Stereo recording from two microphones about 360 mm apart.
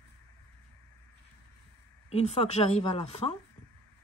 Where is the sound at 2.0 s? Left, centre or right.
Centre.